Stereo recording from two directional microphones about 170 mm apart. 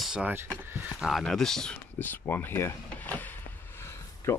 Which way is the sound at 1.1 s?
Centre (ahead or behind).